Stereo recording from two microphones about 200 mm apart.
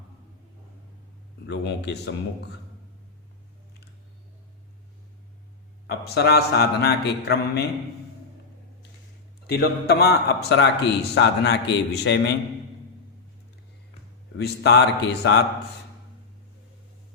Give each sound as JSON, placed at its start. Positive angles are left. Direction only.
{"t": 1.6, "sound": "speech", "side_deg": 60}
{"t": 5.9, "sound": "speech", "side_deg": 55}
{"t": 9.5, "sound": "speech", "side_deg": 55}
{"t": 14.3, "sound": "speech", "side_deg": 55}